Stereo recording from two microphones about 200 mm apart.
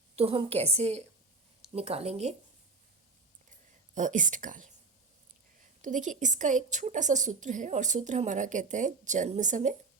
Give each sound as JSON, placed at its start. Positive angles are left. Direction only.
{"t": 0.2, "sound": "a woman's voice", "side_deg": -30}
{"t": 3.9, "sound": "a woman's voice", "side_deg": -40}
{"t": 5.8, "sound": "a woman's voice", "side_deg": -40}